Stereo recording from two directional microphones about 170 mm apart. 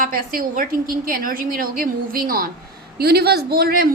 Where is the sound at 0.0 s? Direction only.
55° right (ahead or behind).